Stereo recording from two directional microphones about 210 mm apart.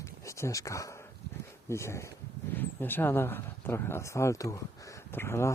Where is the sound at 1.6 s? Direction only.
15° left (ahead or behind).